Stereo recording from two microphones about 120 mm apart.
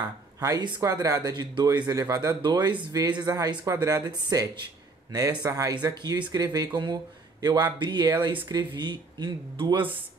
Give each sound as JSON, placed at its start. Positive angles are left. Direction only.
{"t": 0.4, "sound": "speech", "side_deg": -35}